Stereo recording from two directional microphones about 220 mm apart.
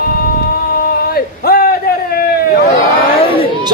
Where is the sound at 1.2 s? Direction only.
45° left (ahead or behind).